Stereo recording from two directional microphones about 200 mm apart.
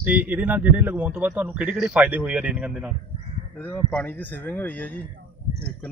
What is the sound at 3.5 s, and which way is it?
A man's voice, 10° left (ahead or behind).